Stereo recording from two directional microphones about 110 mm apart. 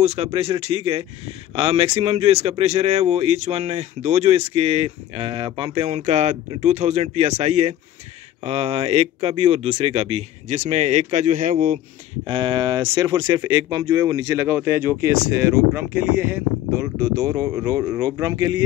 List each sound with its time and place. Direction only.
0.0 s speech: 70° right (ahead or behind); by 5.9 s 50° right (ahead or behind)
5.9 s speech: 90° right
8.5 s speech: 65° right (ahead or behind); by 11.2 s 90° right
12.3 s speech: 50° right (ahead or behind); by 14.4 s 35° right (ahead or behind)
14.4 s speech: 20° right (ahead or behind)
17.0 s speech: 35° right (ahead or behind)